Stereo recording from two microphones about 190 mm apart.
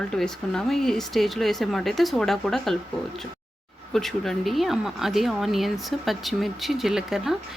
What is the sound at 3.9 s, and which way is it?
Speech, centre (ahead or behind).